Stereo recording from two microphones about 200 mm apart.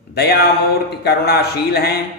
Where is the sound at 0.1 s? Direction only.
55° left (ahead or behind).